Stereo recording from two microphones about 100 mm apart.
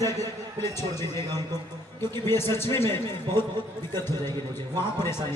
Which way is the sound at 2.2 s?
25° left (ahead or behind).